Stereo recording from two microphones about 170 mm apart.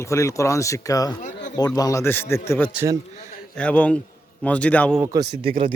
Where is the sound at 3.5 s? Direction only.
10° left (ahead or behind).